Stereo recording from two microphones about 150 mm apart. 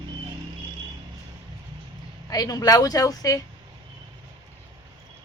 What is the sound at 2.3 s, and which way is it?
A woman's voice, 25° left (ahead or behind).